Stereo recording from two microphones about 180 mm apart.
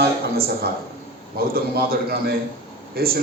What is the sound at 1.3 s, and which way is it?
A man's voice, 60° right (ahead or behind).